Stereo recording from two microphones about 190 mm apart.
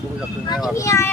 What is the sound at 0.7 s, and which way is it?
Speech, 15° left (ahead or behind).